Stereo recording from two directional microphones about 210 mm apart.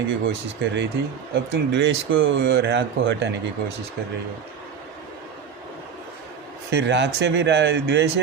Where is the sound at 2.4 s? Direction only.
50° right (ahead or behind).